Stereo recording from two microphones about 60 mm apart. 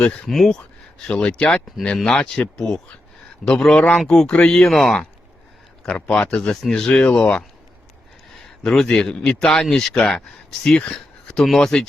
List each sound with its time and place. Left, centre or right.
0.0 s speech: centre
0.3 s speech: centre
1.0 s speech: centre
6.5 s speech: centre
8.6 s speech: centre
11.3 s speech: centre